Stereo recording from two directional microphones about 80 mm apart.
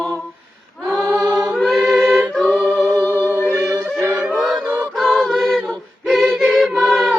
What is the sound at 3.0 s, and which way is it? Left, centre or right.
Music, left.